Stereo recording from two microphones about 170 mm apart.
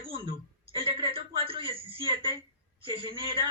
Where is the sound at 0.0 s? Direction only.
30° right (ahead or behind).